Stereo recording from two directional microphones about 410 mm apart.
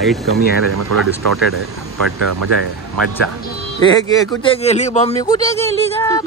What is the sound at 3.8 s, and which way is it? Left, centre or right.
Speech, centre.